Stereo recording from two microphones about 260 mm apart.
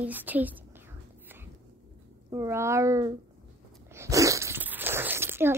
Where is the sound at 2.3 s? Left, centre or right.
Centre.